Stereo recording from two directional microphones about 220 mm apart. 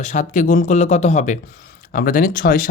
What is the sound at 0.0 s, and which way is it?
Speech, 35° left (ahead or behind).